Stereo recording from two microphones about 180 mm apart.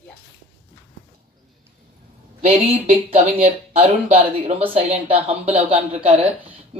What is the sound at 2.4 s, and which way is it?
Speech, 35° right (ahead or behind).